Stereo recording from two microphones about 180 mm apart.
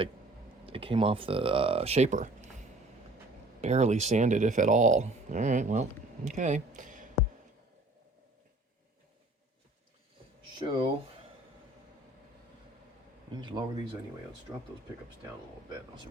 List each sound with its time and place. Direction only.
0.6 s speech: 30° right (ahead or behind)
3.6 s speech: 40° right (ahead or behind)
10.6 s speech: 25° right (ahead or behind)
13.3 s speech: 25° right (ahead or behind)